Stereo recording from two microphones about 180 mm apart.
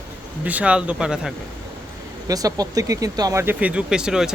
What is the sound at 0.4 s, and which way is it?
Speech, 10° right (ahead or behind).